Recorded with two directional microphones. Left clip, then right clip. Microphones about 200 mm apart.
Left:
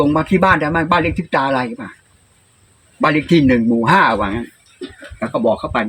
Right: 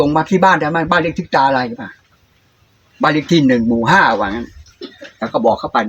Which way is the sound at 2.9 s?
Centre (ahead or behind).